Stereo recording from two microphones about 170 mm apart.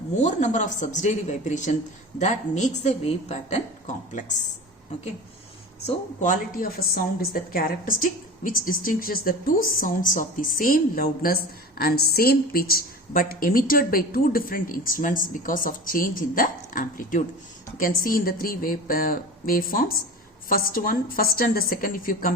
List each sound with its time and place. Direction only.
0.2 s a woman's voice: 45° left (ahead or behind)
5.8 s a woman's voice: 45° left (ahead or behind)